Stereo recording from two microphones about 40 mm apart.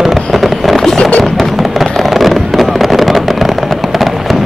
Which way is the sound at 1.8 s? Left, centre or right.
Centre.